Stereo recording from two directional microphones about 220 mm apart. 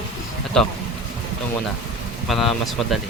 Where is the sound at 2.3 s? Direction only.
Centre (ahead or behind).